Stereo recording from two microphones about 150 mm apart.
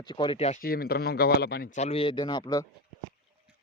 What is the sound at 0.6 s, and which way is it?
Speech, 85° left.